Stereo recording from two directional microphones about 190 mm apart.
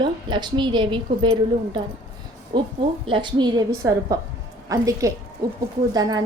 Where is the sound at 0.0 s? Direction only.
25° right (ahead or behind).